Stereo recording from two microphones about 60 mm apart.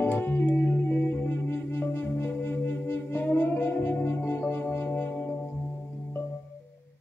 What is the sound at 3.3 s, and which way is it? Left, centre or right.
Music, left.